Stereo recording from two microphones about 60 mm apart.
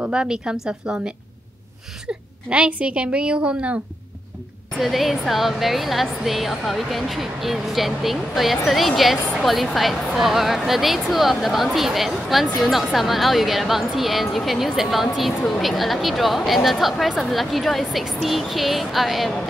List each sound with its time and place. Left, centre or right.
0.0 s a woman's voice: centre
4.7 s speech: centre